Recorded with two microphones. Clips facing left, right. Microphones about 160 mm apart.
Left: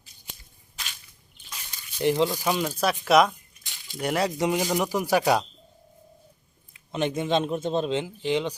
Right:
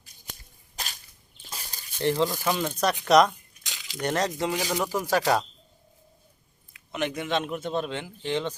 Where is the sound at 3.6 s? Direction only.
90° right.